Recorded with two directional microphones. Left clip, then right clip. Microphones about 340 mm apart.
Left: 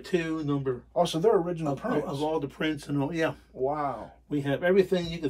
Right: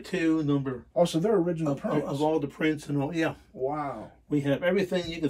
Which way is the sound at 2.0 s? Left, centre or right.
Centre.